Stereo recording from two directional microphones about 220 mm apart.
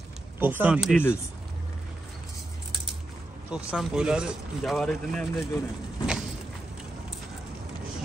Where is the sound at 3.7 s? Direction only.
5° right (ahead or behind).